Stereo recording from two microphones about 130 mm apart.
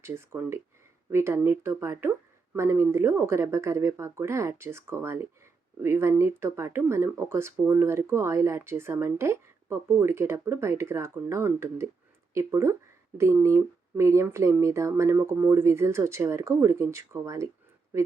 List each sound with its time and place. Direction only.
0.0 s speech: 20° right (ahead or behind)